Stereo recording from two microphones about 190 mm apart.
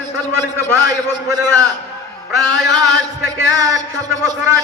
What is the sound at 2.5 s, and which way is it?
Speech, centre (ahead or behind).